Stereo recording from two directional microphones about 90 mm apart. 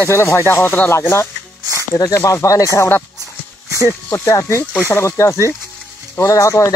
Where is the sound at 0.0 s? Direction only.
30° left (ahead or behind).